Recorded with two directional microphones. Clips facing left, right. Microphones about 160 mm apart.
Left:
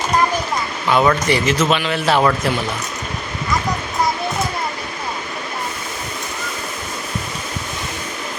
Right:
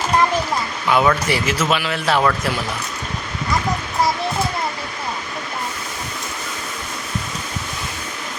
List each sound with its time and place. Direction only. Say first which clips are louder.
0.9 s a man's voice: left 2 dB; 10° right (ahead or behind)